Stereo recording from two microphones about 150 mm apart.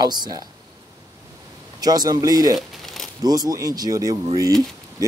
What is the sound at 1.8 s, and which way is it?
Speech, 25° right (ahead or behind).